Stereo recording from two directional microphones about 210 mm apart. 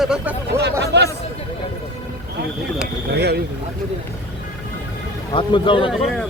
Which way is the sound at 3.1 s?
50° right (ahead or behind).